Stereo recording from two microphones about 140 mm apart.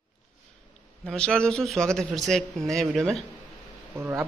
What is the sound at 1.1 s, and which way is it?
Speech, 5° left (ahead or behind).